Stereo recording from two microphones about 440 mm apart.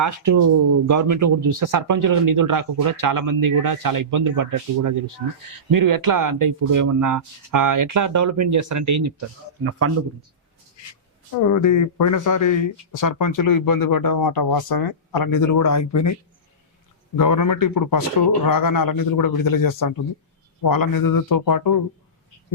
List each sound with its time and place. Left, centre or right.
0.0 s speech: right
11.4 s speech: left
17.2 s speech: left